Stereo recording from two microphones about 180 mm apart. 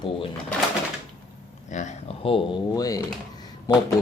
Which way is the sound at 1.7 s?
40° left (ahead or behind).